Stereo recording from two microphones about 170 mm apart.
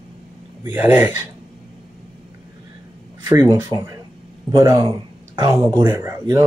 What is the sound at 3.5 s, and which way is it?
Speech, 15° right (ahead or behind).